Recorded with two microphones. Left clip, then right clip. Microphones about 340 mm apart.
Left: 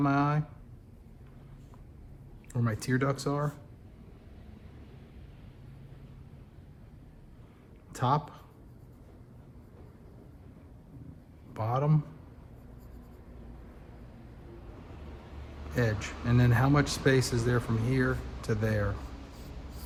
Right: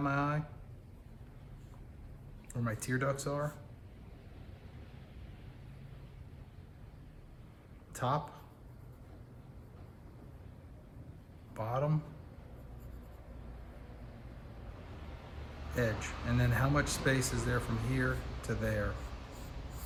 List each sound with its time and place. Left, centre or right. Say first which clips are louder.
0.0 s a sound: left 6 dB; centre
2.5 s speech: left 5 dB; centre
7.9 s speech: left 6 dB; centre
11.5 s a man's voice: left 4 dB; centre
16.0 s speech: left 5 dB; centre